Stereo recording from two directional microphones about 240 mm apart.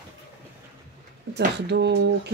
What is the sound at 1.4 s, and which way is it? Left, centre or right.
Speech, right.